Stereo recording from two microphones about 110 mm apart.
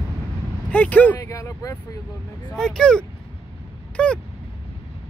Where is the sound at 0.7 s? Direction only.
15° left (ahead or behind).